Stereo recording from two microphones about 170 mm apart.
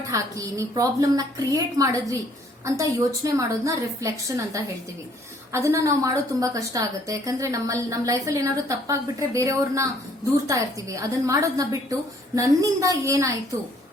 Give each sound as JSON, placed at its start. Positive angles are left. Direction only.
{"t": 0.1, "sound": "a woman's voice", "side_deg": -20}